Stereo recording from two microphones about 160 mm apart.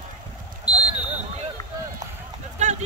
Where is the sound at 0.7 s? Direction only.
25° left (ahead or behind).